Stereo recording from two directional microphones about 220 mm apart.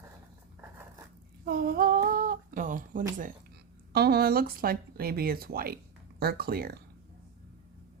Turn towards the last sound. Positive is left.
turn(degrees=-45)  # may be behind; listen again after turning